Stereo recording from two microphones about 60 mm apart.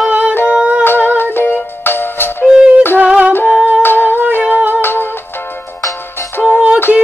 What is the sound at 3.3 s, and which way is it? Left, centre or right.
Humming, left.